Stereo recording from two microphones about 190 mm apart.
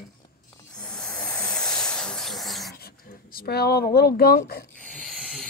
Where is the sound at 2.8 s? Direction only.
55° left (ahead or behind).